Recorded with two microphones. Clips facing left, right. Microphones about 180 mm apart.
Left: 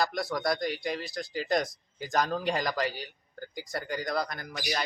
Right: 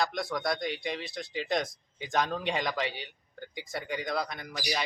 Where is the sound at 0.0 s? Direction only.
Centre (ahead or behind).